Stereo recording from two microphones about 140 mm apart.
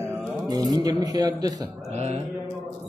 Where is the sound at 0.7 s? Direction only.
25° right (ahead or behind).